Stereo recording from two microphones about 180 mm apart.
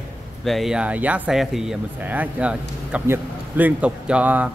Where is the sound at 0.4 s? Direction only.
Centre (ahead or behind).